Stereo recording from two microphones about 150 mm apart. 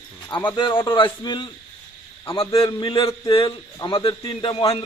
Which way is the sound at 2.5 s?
35° left (ahead or behind).